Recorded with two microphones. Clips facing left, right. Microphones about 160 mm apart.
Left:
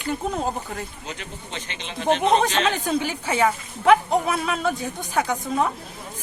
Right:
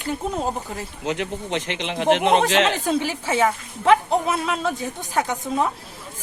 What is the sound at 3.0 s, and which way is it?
A woman's voice, centre (ahead or behind).